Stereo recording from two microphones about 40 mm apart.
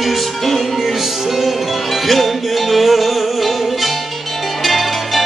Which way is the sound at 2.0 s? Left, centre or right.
Centre.